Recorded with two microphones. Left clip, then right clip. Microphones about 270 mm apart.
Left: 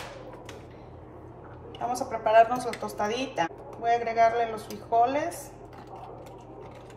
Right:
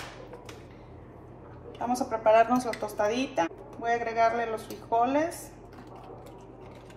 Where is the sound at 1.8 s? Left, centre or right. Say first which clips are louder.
Right 2 dB; centre.